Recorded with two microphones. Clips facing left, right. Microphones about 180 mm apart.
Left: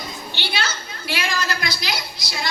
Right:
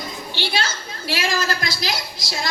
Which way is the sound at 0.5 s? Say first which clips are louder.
Right 2 dB; 45° right (ahead or behind).